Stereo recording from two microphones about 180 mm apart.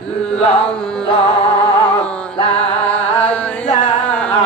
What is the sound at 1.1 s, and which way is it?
Music, 35° left (ahead or behind).